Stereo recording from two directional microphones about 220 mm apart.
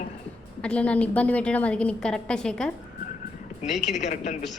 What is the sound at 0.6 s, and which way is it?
A woman's voice, 5° left (ahead or behind).